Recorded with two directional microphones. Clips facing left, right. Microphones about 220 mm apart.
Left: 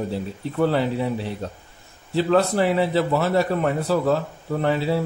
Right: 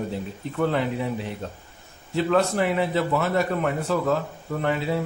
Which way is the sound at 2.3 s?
30° left (ahead or behind).